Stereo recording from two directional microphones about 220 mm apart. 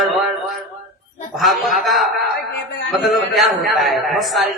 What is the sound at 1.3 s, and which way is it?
A man's voice, centre (ahead or behind).